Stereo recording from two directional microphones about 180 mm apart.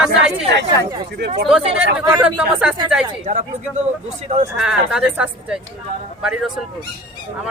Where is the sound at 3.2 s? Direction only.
40° right (ahead or behind).